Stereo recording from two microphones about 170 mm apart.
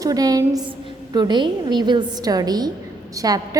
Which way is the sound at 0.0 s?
20° right (ahead or behind).